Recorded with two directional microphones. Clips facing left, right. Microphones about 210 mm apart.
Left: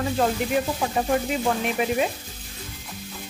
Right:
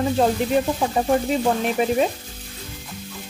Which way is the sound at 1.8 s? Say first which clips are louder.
Right 4 dB; 30° right (ahead or behind).